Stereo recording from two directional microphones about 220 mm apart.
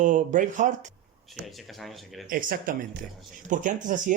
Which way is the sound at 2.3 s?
40° right (ahead or behind).